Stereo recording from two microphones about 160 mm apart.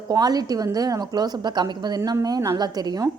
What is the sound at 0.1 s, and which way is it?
Speech, 25° right (ahead or behind).